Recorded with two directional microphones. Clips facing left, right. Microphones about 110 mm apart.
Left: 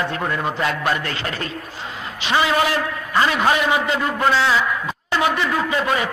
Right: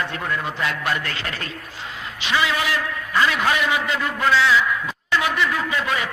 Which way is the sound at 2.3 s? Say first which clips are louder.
Left 4 dB; 35° left (ahead or behind).